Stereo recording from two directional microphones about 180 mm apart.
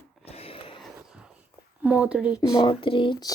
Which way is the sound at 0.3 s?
35° left (ahead or behind).